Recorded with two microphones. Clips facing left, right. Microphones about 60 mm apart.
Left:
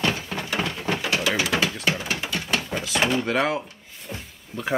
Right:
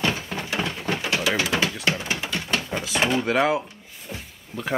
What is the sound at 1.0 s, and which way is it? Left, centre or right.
Pigeon, centre.